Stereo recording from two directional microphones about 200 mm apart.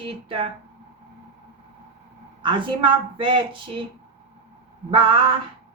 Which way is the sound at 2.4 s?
25° right (ahead or behind).